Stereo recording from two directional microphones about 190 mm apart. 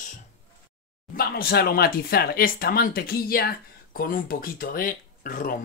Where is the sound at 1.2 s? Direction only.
55° left (ahead or behind).